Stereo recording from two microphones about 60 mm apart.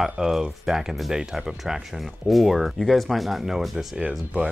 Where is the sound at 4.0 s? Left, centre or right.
Centre.